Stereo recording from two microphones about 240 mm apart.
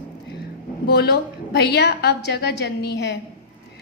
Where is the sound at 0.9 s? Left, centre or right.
Left.